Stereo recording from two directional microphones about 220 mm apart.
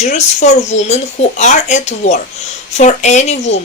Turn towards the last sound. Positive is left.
turn(degrees=30)  # may be behind; listen again after turning